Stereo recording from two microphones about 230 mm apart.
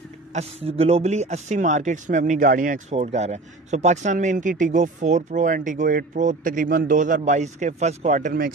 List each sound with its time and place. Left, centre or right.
0.3 s speech: right